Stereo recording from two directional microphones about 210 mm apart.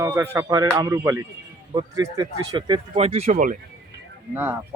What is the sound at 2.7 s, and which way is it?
Speech, 30° right (ahead or behind).